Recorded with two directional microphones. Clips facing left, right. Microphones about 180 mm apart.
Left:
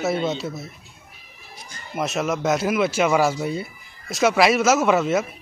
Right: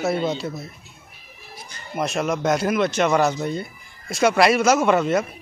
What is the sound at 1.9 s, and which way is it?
Speech, centre (ahead or behind).